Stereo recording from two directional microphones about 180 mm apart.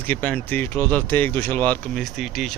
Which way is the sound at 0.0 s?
10° left (ahead or behind).